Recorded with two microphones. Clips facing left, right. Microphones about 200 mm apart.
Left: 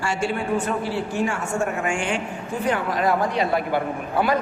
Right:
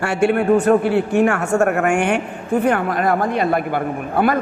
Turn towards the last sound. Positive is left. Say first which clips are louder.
# right 4 dB
turn(degrees=-55)  # may be behind; listen again after turning